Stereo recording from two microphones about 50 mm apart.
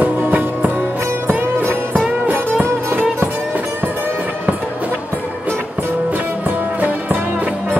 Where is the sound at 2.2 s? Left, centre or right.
Right.